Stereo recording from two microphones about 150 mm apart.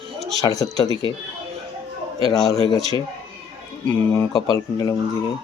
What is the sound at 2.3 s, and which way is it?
Speech, 25° left (ahead or behind).